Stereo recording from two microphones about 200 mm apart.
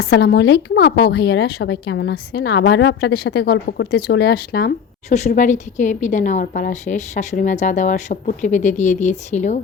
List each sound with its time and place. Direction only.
0.0 s a woman's voice: 55° left (ahead or behind)
5.0 s a woman's voice: 35° left (ahead or behind)